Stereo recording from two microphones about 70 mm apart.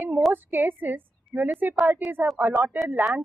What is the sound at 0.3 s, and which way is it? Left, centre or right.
A woman's voice, right.